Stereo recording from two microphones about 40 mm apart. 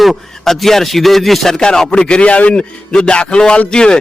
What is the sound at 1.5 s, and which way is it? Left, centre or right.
Speech, centre.